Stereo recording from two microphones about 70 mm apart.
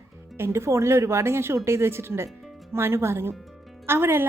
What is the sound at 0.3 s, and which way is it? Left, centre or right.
A woman's voice, right.